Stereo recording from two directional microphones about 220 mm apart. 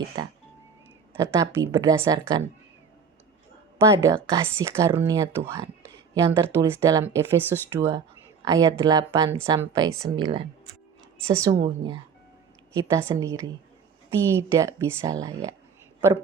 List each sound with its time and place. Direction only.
0.1 s speech: 20° right (ahead or behind)
3.8 s speech: 15° right (ahead or behind)
11.5 s speech: 25° right (ahead or behind)
12.7 s speech: 15° right (ahead or behind)